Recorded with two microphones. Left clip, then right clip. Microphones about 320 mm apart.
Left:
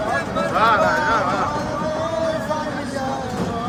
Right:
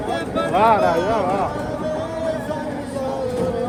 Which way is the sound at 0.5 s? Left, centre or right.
Centre.